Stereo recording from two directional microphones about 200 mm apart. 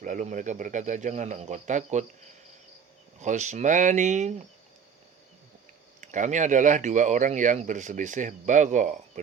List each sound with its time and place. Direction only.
0.0 s speech: 40° right (ahead or behind)
3.2 s speech: 35° right (ahead or behind)
6.0 s speech: 40° right (ahead or behind)